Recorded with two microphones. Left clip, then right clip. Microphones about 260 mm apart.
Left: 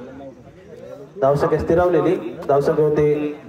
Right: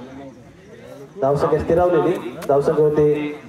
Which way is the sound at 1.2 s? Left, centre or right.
Left.